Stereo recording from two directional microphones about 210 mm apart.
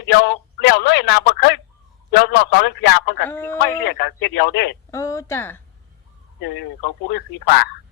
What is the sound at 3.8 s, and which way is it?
Speech, 55° left (ahead or behind).